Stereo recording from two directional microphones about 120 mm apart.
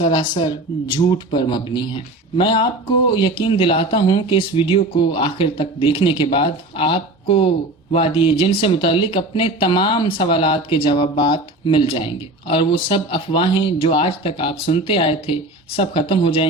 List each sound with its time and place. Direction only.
0.0 s speech: 40° left (ahead or behind)